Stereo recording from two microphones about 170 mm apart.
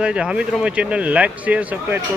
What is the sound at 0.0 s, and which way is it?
Speech, 5° right (ahead or behind).